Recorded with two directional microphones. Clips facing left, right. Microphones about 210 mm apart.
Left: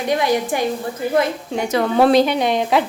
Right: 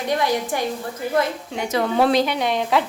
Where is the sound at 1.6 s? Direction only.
50° left (ahead or behind).